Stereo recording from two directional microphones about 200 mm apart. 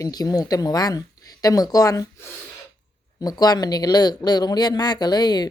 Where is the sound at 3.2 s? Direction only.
20° left (ahead or behind).